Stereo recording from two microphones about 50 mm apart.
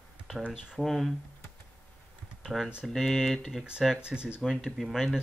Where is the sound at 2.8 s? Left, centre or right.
Centre.